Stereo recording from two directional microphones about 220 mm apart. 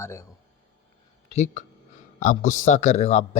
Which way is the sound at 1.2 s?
30° left (ahead or behind).